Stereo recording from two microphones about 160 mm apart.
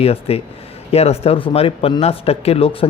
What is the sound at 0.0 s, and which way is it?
Speech, 40° left (ahead or behind).